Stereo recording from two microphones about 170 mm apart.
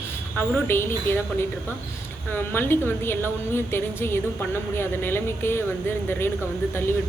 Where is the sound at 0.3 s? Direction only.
15° left (ahead or behind).